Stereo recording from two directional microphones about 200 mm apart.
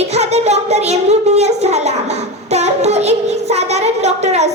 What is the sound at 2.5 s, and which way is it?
Child singing, 35° right (ahead or behind).